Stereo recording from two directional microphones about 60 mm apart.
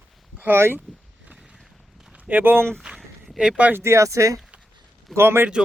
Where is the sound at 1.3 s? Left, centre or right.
Centre.